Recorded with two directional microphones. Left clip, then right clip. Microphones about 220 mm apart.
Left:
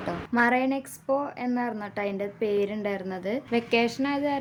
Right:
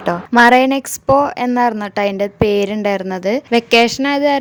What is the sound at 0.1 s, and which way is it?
A woman's voice, 45° right (ahead or behind).